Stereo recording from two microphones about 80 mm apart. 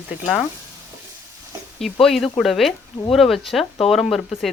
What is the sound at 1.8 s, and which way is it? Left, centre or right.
Speech, centre.